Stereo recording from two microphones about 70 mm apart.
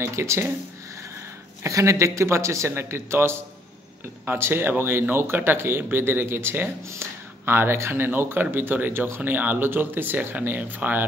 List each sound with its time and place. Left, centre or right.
0.0 s speech: right
1.6 s a man's voice: right